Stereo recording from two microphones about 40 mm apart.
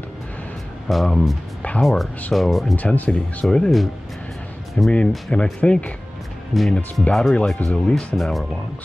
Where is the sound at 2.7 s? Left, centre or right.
Left.